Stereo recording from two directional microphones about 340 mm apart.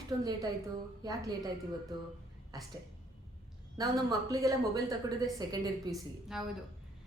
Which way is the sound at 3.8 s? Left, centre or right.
Centre.